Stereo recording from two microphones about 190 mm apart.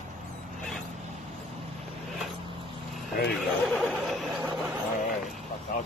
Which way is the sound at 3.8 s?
Centre (ahead or behind).